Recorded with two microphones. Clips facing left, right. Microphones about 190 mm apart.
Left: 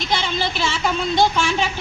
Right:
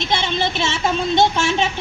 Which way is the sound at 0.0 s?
25° right (ahead or behind).